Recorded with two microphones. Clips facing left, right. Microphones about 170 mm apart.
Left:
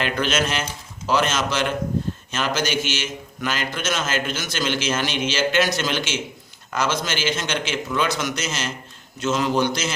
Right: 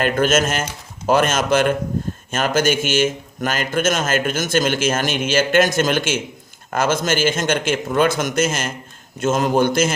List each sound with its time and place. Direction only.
0.0 s a man's voice: 45° right (ahead or behind)